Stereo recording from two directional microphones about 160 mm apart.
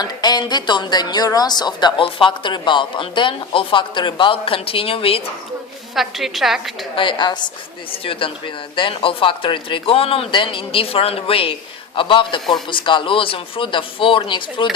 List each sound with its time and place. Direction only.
0.0 s speech: 25° left (ahead or behind)
5.9 s a woman's voice: centre (ahead or behind)
6.9 s a woman's voice: 30° left (ahead or behind)